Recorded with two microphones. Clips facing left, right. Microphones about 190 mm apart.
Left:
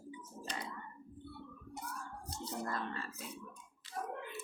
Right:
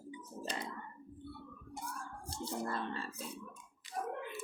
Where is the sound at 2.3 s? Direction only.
30° right (ahead or behind).